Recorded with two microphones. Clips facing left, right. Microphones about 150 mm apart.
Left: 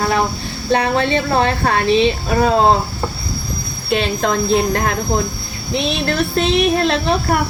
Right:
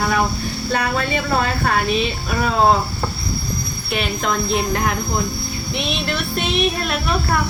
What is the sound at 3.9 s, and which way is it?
Speech, 30° left (ahead or behind).